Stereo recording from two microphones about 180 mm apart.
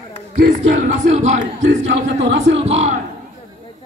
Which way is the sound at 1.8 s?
75° right (ahead or behind).